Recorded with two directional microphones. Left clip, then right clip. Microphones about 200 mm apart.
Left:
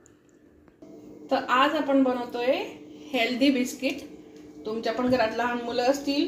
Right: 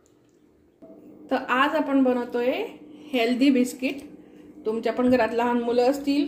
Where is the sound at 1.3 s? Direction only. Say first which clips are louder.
Even; 50° right (ahead or behind).